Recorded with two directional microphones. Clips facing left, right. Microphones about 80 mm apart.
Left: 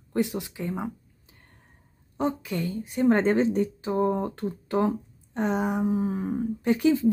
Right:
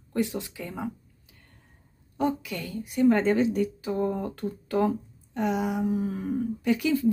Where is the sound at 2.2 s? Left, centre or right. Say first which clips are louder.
Left 1 dB; left.